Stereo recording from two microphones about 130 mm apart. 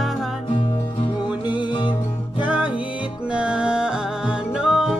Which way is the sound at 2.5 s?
10° right (ahead or behind).